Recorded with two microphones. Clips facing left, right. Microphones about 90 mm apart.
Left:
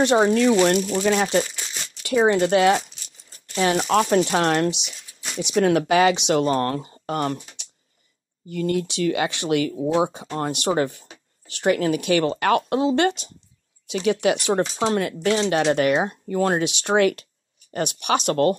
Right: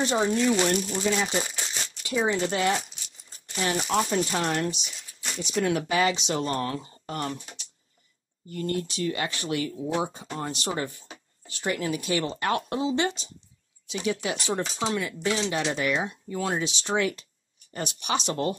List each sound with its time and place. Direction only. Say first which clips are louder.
0.0 s speech: left 7 dB; 70° left (ahead or behind); by 4.9 s 85° left
5.4 s speech: left 7 dB; 70° left (ahead or behind)
9.9 s speech: left 7 dB; 65° left (ahead or behind)
16.1 s speech: left 8 dB; 55° left (ahead or behind)